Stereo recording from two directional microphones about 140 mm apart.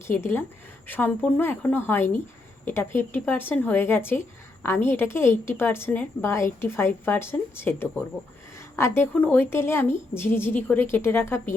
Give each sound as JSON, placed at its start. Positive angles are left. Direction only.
{"t": 0.1, "sound": "a woman's voice", "side_deg": 15}